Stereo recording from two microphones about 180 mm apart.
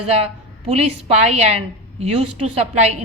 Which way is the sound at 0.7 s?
35° right (ahead or behind).